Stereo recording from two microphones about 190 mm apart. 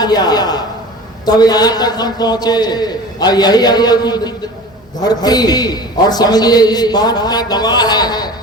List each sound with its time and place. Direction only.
0.0 s a man's voice: 20° left (ahead or behind)